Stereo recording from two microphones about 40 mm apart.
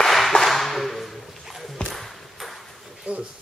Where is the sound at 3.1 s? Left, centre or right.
Right.